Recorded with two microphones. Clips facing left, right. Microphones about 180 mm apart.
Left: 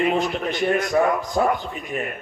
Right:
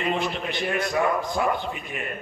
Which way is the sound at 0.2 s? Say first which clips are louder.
Left 5 dB; 45° left (ahead or behind).